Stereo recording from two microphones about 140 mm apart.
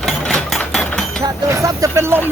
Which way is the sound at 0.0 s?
5° left (ahead or behind).